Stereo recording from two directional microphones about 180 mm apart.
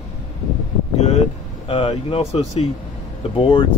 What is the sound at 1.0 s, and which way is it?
Speech, 35° left (ahead or behind).